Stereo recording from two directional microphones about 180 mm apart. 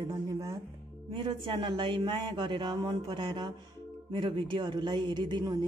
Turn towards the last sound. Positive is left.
turn(degrees=-25)  # may be behind; listen again after turning